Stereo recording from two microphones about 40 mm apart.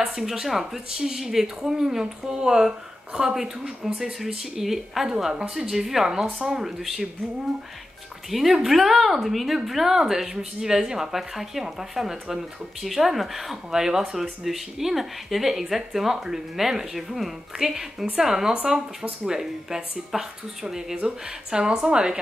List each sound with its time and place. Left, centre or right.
0.0 s a woman's voice: centre
8.3 s a woman's voice: centre; by 22.2 s right